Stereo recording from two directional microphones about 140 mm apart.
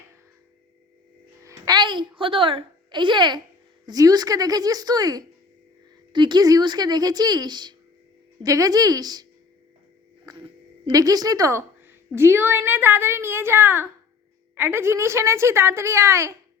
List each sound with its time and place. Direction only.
1.5 s a woman's voice: 30° right (ahead or behind)
10.2 s a woman's voice: 30° right (ahead or behind)